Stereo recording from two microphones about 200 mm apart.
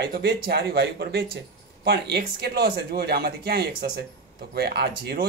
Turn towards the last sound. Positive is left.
turn(degrees=-55)  # may be behind; listen again after turning